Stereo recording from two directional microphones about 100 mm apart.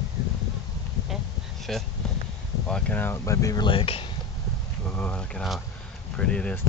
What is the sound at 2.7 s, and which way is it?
Speech, 15° left (ahead or behind).